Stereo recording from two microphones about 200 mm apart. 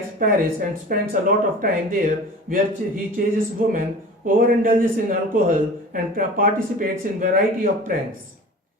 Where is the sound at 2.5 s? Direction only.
45° right (ahead or behind).